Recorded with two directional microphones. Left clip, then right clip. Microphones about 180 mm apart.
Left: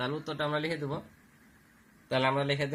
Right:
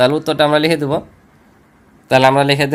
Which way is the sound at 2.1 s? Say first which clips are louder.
Right 17 dB; 60° right (ahead or behind).